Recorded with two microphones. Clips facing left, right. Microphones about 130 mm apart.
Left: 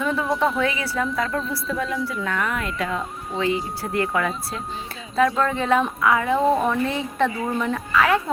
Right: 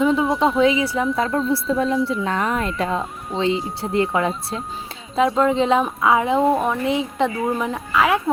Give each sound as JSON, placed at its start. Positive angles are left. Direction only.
{"t": 0.0, "sound": "a woman's voice", "side_deg": -20}
{"t": 1.1, "sound": "a woman's voice", "side_deg": -25}